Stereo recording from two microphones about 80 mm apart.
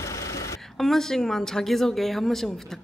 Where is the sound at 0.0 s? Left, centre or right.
Left.